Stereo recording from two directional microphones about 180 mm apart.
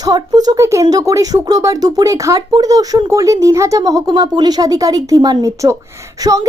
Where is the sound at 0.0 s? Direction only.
20° right (ahead or behind).